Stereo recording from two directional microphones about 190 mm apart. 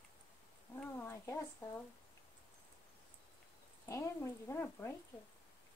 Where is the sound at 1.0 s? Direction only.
10° left (ahead or behind).